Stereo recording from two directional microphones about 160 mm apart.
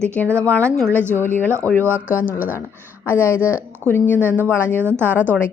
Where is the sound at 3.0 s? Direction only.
15° left (ahead or behind).